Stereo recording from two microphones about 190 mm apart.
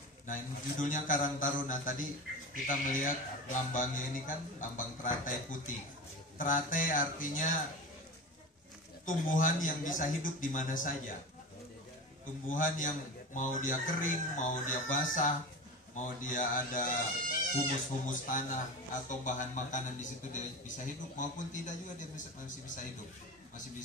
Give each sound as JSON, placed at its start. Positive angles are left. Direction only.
{"t": 0.3, "sound": "a man's voice", "side_deg": 45}
{"t": 9.0, "sound": "a man's voice", "side_deg": 45}
{"t": 12.4, "sound": "a man's voice", "side_deg": 45}